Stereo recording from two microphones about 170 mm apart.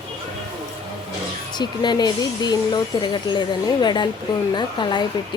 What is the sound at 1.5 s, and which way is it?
Speech, 25° left (ahead or behind).